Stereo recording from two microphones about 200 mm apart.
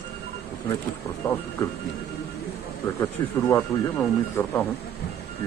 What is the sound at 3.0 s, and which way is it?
Speech, 15° left (ahead or behind).